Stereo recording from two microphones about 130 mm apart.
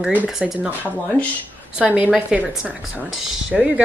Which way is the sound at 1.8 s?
10° right (ahead or behind).